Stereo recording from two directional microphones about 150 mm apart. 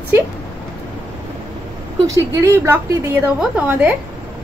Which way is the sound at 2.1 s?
20° right (ahead or behind).